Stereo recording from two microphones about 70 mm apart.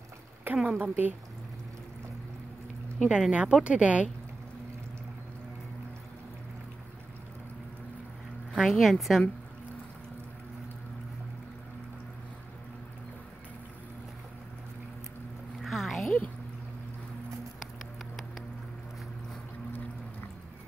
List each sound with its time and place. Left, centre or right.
0.7 s a woman's voice: right
3.1 s speech: centre
8.5 s speech: centre
15.6 s a sound: centre